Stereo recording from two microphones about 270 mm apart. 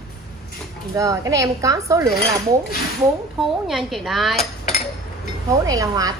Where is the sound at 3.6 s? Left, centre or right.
Centre.